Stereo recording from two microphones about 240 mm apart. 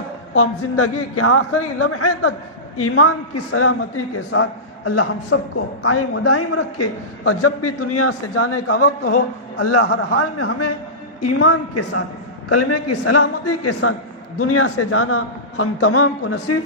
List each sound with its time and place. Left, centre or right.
0.3 s a man's voice: left
12.4 s a man's voice: left